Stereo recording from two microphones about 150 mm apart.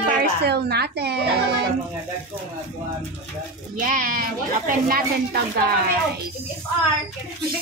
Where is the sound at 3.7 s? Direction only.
65° right (ahead or behind).